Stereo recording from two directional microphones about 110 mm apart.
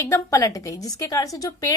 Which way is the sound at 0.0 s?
30° left (ahead or behind).